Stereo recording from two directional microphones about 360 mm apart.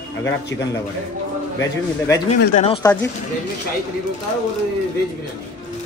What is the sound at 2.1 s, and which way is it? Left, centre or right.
Speech, left.